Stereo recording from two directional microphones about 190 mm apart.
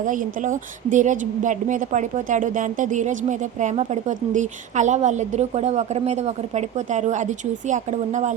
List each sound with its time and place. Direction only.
0.0 s a woman's voice: 45° right (ahead or behind)